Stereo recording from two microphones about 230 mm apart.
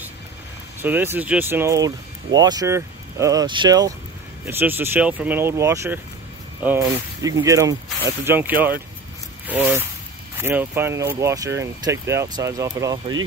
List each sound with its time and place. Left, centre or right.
0.7 s speech: centre